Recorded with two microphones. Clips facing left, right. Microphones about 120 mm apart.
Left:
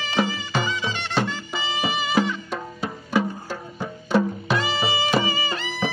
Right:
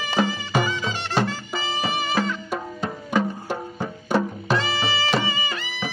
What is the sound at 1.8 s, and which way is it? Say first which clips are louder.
Music: left 2 dB; 15° left (ahead or behind).